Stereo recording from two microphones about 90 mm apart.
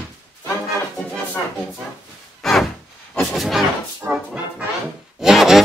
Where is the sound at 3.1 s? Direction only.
5° left (ahead or behind).